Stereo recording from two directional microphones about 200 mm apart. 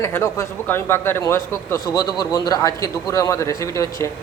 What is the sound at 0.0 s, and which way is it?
A man's voice, 15° left (ahead or behind).